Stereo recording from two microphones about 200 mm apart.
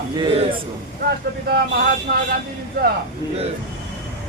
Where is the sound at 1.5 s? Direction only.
50° right (ahead or behind).